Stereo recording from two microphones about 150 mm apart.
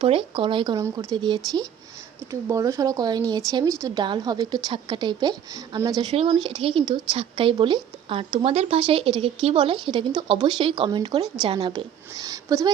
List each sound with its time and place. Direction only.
0.0 s speech: 35° right (ahead or behind)